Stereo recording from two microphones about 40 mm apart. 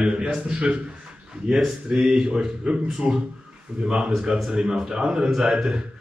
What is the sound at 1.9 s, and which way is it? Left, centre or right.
A man's voice, centre.